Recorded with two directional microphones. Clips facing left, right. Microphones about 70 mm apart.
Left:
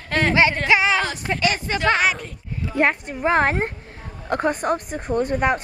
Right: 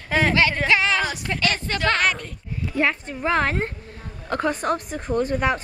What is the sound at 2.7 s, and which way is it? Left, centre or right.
Speech, left.